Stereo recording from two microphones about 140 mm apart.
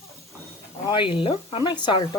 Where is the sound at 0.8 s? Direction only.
35° left (ahead or behind).